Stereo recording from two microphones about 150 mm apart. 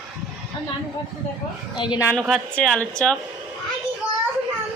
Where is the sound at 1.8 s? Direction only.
30° left (ahead or behind).